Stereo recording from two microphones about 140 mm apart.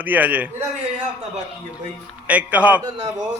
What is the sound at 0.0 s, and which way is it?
Speech, 10° right (ahead or behind).